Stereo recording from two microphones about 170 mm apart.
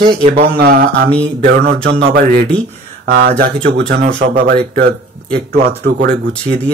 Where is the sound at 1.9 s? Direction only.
85° right.